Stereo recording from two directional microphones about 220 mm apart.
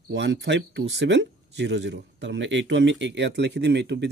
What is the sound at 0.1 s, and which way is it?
Speech, 55° right (ahead or behind).